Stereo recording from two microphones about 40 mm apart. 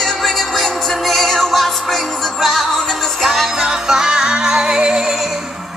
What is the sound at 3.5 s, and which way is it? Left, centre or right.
Music, centre.